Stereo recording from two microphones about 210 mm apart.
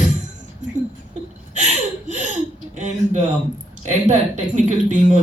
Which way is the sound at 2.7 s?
35° right (ahead or behind).